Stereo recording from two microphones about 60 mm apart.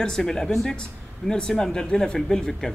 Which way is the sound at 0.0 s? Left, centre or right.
Centre.